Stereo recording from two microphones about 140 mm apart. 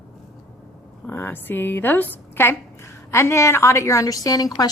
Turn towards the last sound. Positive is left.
turn(degrees=25)  # may be behind; listen again after turning